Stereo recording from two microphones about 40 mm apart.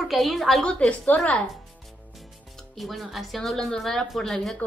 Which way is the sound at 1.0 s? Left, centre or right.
Left.